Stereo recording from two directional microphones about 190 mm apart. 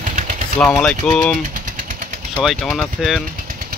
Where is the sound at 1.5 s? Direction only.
45° right (ahead or behind).